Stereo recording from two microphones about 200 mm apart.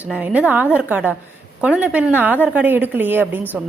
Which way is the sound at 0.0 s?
5° right (ahead or behind).